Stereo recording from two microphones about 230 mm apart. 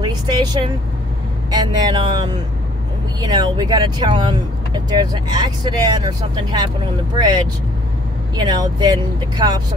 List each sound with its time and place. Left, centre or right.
0.0 s speech: centre
8.4 s speech: centre